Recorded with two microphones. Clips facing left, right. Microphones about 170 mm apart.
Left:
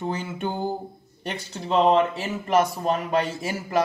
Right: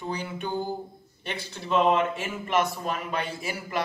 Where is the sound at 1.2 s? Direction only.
40° left (ahead or behind).